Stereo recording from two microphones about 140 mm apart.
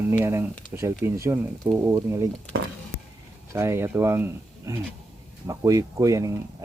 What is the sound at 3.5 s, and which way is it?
Speech, 20° right (ahead or behind).